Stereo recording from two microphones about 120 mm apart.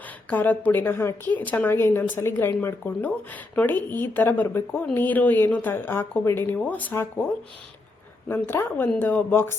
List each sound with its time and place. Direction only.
0.3 s a woman's voice: 15° left (ahead or behind)
8.3 s a woman's voice: 20° left (ahead or behind)